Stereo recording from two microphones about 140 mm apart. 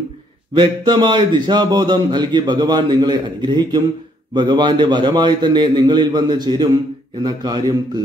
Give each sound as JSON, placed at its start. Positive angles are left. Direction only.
{"t": 0.6, "sound": "speech", "side_deg": -35}